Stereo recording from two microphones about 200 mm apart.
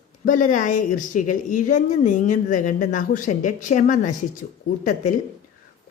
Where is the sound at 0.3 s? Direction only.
40° left (ahead or behind).